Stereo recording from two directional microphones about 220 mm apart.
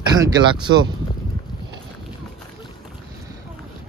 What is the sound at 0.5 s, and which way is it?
Speech, 20° right (ahead or behind).